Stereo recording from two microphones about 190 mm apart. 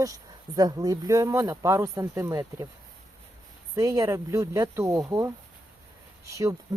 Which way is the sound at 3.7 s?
15° right (ahead or behind).